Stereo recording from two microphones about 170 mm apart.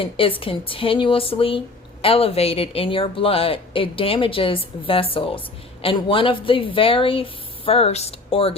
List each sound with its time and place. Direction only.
0.0 s speech: 30° left (ahead or behind)